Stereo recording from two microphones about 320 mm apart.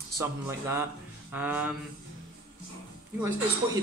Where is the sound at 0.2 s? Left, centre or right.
Centre.